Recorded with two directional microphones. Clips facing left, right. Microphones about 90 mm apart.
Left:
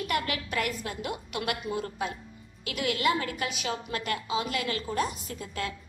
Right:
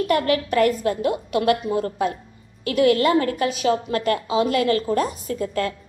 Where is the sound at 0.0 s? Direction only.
40° right (ahead or behind).